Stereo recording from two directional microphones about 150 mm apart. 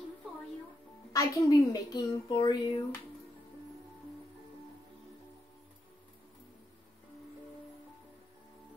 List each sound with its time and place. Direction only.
1.1 s a woman's voice: 25° left (ahead or behind)